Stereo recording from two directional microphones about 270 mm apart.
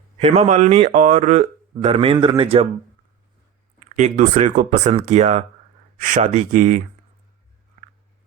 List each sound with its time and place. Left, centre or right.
0.2 s speech: right
3.8 s speech: right